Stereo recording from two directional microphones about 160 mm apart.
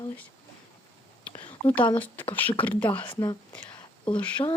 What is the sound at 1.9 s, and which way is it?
Speech, 10° left (ahead or behind).